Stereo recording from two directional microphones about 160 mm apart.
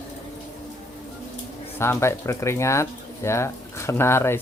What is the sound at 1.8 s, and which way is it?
Speech, 15° left (ahead or behind).